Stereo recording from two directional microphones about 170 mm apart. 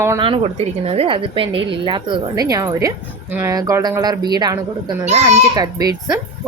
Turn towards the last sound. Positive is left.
turn(degrees=-20)  # may be behind; listen again after turning